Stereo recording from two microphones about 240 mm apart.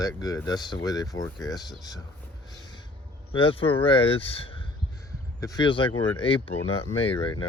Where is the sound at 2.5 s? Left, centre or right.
Centre.